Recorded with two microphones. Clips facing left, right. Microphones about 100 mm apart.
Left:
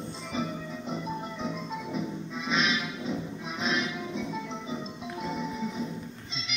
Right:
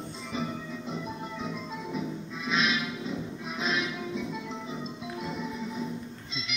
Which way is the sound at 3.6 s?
5° right (ahead or behind).